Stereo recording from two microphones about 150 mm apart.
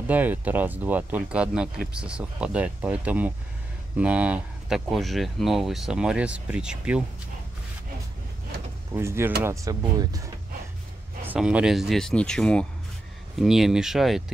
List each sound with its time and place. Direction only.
0.1 s speech: 10° right (ahead or behind)
8.9 s speech: 15° right (ahead or behind)
11.2 s speech: 10° right (ahead or behind)